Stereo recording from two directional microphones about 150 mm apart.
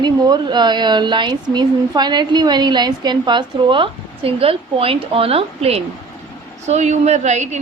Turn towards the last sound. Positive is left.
turn(degrees=-50)  # may be behind; listen again after turning